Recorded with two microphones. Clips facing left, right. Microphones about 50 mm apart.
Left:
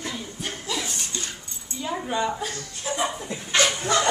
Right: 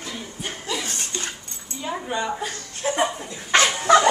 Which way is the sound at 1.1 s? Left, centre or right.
Right.